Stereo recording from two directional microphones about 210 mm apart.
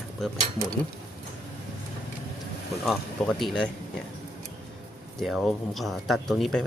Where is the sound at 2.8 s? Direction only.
Centre (ahead or behind).